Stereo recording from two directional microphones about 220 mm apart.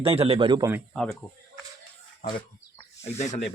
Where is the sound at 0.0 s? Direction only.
25° right (ahead or behind).